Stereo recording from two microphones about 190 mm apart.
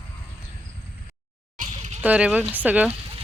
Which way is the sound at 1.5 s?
40° right (ahead or behind).